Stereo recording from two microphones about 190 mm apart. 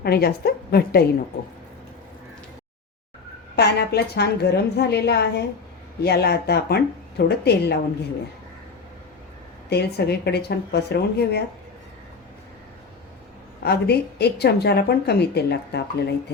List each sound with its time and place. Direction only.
0.0 s a woman's voice: 55° left (ahead or behind)
3.5 s speech: 60° left (ahead or behind)
9.6 s speech: 60° left (ahead or behind)
13.6 s speech: 60° left (ahead or behind)